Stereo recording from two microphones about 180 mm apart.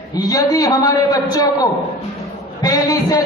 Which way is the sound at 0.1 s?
20° left (ahead or behind).